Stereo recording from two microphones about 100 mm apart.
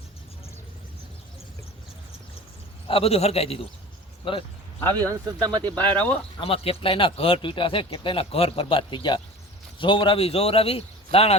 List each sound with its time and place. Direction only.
2.8 s a man's voice: 75° left (ahead or behind)
4.2 s speech: 55° left (ahead or behind)
5.4 s speech: 45° right (ahead or behind)
5.7 s speech: 15° left (ahead or behind)
6.4 s speech: 70° left (ahead or behind)